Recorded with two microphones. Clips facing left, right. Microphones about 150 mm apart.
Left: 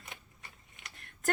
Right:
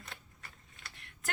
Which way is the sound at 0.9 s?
45° left (ahead or behind).